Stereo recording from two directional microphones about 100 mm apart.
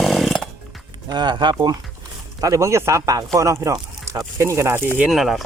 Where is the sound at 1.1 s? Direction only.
50° right (ahead or behind).